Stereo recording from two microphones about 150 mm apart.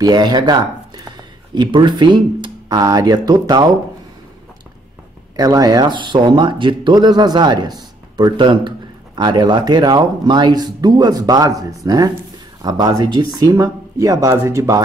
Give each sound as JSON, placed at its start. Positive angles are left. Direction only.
{"t": 0.0, "sound": "speech", "side_deg": -30}
{"t": 5.3, "sound": "speech", "side_deg": -25}